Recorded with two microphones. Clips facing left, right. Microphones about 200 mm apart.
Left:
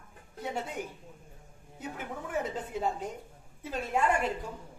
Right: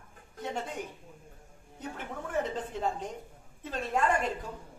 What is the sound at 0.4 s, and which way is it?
A man's voice, 10° left (ahead or behind).